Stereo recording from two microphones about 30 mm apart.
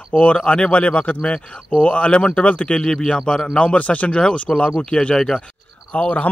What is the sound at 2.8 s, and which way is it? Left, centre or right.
Speech, left.